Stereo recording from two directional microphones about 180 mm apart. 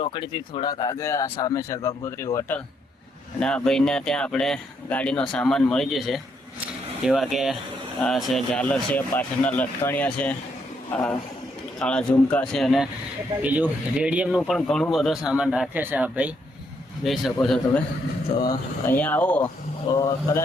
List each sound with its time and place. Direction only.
0.0 s speech: 25° left (ahead or behind)
3.4 s speech: 5° left (ahead or behind)
18.3 s speech: 25° left (ahead or behind)
18.9 s speech: 10° left (ahead or behind)
19.9 s speech: 20° left (ahead or behind)